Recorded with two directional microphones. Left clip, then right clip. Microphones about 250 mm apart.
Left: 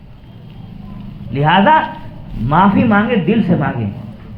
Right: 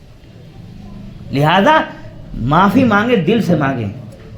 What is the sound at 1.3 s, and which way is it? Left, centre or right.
A man's voice, right.